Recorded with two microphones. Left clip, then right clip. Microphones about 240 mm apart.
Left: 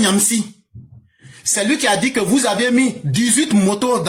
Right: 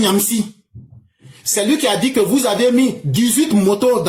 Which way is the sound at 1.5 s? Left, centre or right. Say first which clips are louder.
Even; left.